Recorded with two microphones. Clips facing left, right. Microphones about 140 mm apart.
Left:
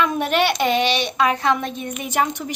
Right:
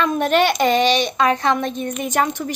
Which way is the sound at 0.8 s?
40° right (ahead or behind).